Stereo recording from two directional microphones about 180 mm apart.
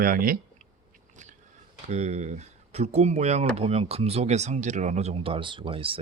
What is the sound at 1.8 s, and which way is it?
Speech, 40° right (ahead or behind).